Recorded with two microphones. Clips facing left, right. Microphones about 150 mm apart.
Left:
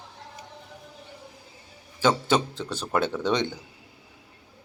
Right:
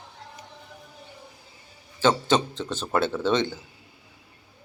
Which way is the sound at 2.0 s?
10° left (ahead or behind).